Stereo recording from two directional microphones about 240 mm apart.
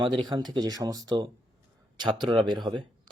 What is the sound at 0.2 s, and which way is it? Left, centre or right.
Speech, centre.